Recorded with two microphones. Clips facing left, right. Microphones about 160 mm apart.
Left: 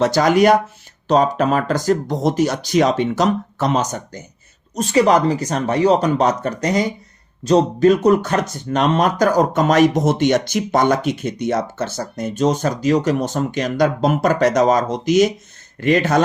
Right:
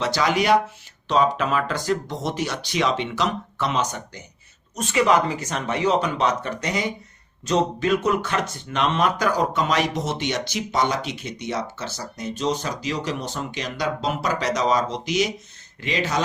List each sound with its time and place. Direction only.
0.0 s speech: 45° left (ahead or behind)